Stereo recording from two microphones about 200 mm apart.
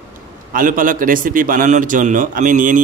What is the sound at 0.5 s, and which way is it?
A man's voice, 45° right (ahead or behind).